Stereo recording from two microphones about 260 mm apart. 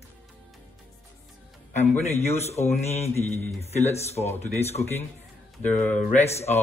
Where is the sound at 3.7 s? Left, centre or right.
Left.